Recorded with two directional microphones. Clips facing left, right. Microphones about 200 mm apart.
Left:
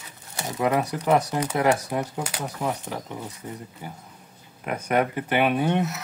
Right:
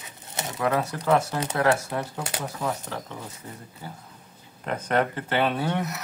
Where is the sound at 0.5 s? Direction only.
15° left (ahead or behind).